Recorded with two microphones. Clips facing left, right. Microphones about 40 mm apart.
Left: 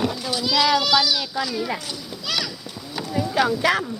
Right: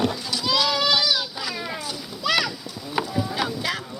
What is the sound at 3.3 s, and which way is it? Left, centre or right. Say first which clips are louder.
Speech: left 7 dB; left.